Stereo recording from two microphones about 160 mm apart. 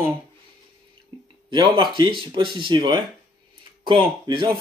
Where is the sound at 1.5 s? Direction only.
30° right (ahead or behind).